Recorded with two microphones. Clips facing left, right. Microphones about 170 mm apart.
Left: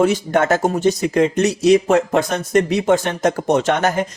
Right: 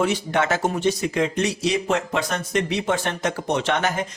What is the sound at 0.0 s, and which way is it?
Speech, 45° left (ahead or behind).